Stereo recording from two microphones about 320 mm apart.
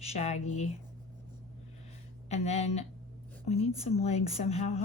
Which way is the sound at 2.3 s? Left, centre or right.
Centre.